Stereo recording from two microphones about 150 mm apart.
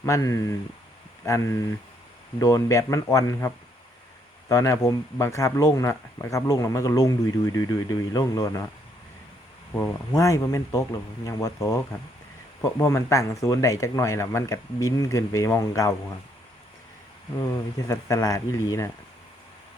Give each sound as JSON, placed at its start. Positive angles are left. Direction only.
{"t": 0.0, "sound": "speech", "side_deg": 20}
{"t": 9.7, "sound": "speech", "side_deg": 20}
{"t": 17.4, "sound": "speech", "side_deg": 20}